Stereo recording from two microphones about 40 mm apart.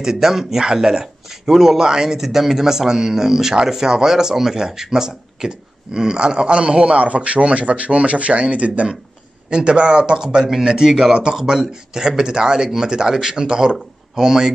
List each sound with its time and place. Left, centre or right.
0.0 s a man's voice: centre